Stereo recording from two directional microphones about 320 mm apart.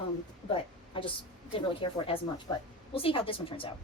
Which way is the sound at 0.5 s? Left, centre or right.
Centre.